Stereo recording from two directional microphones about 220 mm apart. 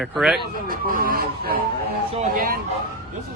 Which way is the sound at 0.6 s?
40° right (ahead or behind).